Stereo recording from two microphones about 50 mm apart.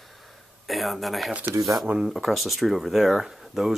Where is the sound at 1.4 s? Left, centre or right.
Right.